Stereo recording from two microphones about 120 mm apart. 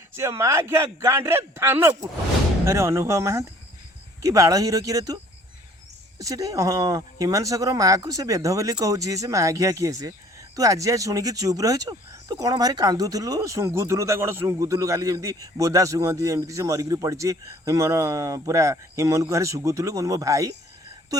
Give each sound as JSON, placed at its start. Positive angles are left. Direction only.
{"t": 0.2, "sound": "speech", "side_deg": -25}